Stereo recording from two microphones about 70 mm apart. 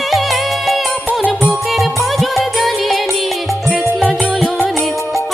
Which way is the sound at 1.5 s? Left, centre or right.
Centre.